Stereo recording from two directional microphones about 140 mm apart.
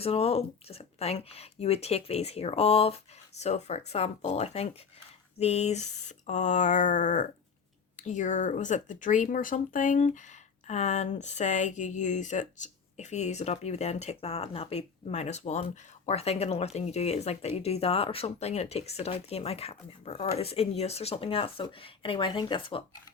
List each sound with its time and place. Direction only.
0.0 s speech: 45° left (ahead or behind)